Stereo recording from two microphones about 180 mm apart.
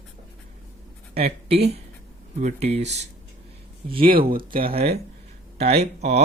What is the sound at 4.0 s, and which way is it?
Speech, 55° right (ahead or behind).